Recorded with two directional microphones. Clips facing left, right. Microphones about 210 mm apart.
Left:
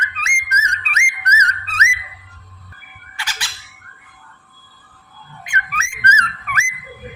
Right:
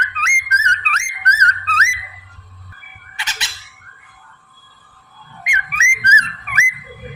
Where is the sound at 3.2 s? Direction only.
20° right (ahead or behind).